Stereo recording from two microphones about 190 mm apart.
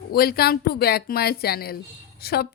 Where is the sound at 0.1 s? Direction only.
55° left (ahead or behind).